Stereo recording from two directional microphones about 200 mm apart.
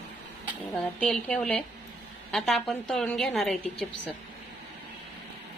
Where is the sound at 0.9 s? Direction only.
5° left (ahead or behind).